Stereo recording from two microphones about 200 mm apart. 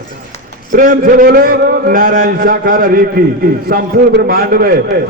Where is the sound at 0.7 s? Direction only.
45° right (ahead or behind).